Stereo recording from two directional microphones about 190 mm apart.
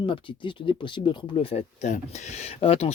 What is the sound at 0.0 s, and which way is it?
Speech, 25° left (ahead or behind).